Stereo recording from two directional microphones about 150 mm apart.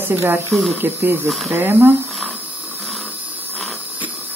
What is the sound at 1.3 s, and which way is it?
Speech, centre (ahead or behind).